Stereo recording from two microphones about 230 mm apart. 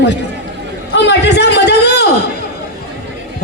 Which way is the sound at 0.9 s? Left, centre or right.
Left.